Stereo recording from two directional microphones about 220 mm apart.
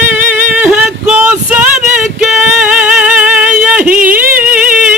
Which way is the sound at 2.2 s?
Centre (ahead or behind).